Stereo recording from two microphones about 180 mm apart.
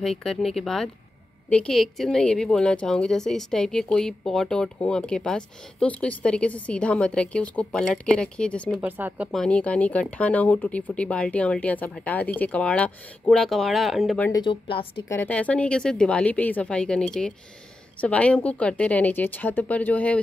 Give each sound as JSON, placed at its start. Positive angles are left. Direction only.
{"t": 0.0, "sound": "a woman's voice", "side_deg": 0}
{"t": 8.8, "sound": "speech", "side_deg": -10}
{"t": 9.3, "sound": "speech", "side_deg": 5}
{"t": 14.3, "sound": "speech", "side_deg": 25}
{"t": 15.0, "sound": "a woman's voice", "side_deg": 10}
{"t": 18.0, "sound": "speech", "side_deg": 5}